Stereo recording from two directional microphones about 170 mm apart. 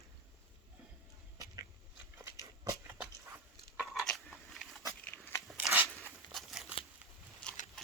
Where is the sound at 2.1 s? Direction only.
15° right (ahead or behind).